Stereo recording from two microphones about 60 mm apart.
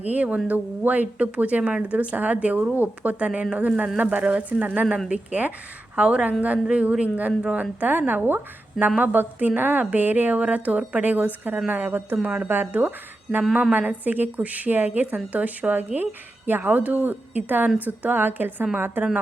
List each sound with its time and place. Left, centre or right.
0.1 s a woman's voice: right